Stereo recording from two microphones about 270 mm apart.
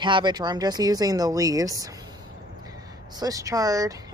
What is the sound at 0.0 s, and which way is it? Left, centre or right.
Speech, centre.